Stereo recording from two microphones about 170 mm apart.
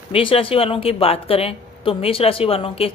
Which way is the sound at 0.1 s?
30° left (ahead or behind).